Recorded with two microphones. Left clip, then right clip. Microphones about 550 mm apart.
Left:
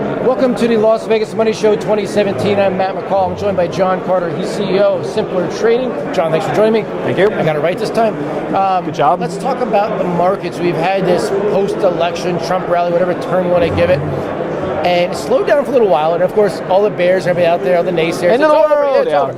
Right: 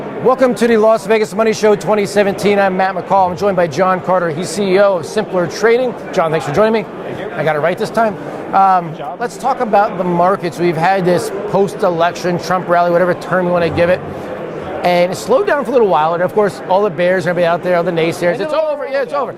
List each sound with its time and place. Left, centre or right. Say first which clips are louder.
0.3 s speech: right 3 dB; right